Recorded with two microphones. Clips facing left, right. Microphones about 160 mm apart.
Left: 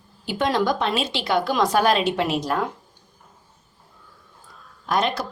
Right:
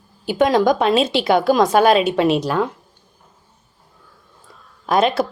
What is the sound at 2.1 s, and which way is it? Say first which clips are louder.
Speech: right 6 dB; 60° right (ahead or behind).